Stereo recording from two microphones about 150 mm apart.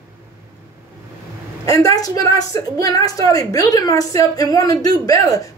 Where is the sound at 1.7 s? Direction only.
25° left (ahead or behind).